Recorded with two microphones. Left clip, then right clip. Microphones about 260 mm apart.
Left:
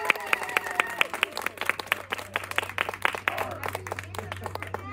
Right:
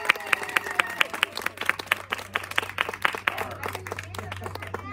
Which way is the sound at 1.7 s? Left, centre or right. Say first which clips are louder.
Right 3 dB; right.